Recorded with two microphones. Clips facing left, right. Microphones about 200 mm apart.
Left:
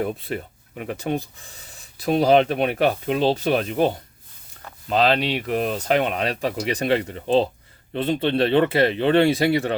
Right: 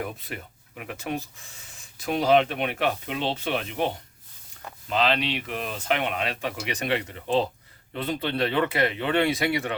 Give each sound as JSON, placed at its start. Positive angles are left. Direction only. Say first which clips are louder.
{"t": 0.0, "sound": "speech", "louder": "left 8 dB", "side_deg": 30}
{"t": 4.9, "sound": "speech", "louder": "left 5 dB", "side_deg": 40}